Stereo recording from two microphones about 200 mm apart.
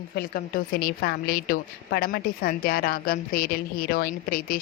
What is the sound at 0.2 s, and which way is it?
A woman's voice, 50° left (ahead or behind).